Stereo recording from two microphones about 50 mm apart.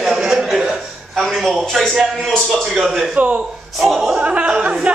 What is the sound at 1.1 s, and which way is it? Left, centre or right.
Speech, centre.